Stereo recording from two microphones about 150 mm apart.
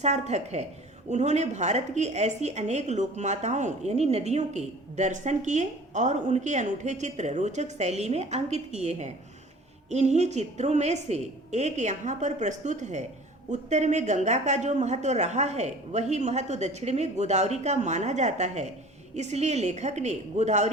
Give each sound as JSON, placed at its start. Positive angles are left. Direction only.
{"t": 0.0, "sound": "a woman's voice", "side_deg": -50}